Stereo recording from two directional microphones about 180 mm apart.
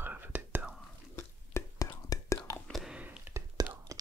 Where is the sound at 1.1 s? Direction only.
15° left (ahead or behind).